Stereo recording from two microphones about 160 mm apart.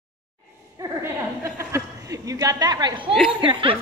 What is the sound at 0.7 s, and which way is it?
Chuckle, 20° right (ahead or behind).